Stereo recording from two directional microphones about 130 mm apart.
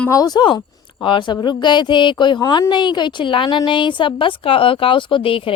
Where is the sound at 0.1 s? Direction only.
30° left (ahead or behind).